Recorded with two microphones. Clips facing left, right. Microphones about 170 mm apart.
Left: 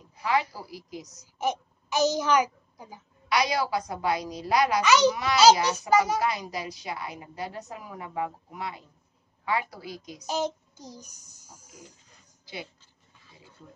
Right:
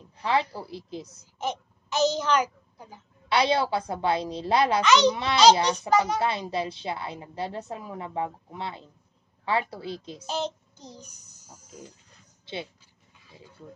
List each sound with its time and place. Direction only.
0.2 s a woman's voice: 30° right (ahead or behind)
1.4 s a child's voice: 10° left (ahead or behind)
3.3 s a woman's voice: 30° right (ahead or behind)
4.8 s a child's voice: 10° left (ahead or behind)
6.1 s a woman's voice: 30° right (ahead or behind)
10.2 s a child's voice: 10° left (ahead or behind)
12.5 s a woman's voice: 25° right (ahead or behind)